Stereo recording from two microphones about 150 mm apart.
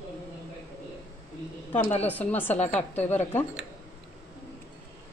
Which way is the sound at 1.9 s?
10° left (ahead or behind).